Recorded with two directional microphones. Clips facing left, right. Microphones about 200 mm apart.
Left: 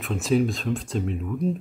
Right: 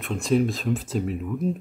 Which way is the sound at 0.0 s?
Centre (ahead or behind).